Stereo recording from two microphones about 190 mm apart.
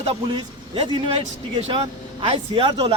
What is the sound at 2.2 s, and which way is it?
Speech, 30° right (ahead or behind).